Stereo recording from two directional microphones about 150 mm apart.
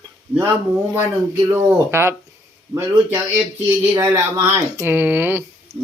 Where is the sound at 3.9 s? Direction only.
20° right (ahead or behind).